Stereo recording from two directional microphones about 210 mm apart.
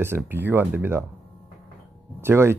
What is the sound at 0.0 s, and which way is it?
Speech, 10° right (ahead or behind).